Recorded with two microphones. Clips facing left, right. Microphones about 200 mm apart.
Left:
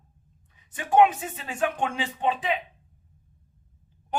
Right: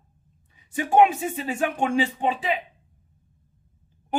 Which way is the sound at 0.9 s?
10° right (ahead or behind).